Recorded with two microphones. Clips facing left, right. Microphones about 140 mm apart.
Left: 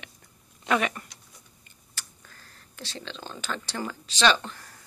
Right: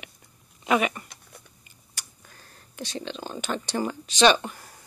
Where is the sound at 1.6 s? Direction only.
15° right (ahead or behind).